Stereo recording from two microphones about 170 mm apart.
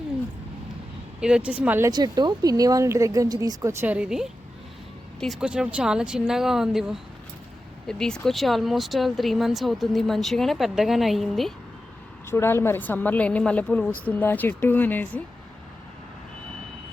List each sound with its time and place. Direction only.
1.2 s speech: 5° right (ahead or behind)
1.9 s speech: 25° right (ahead or behind); by 11.5 s centre (ahead or behind)
12.3 s a woman's voice: 15° left (ahead or behind)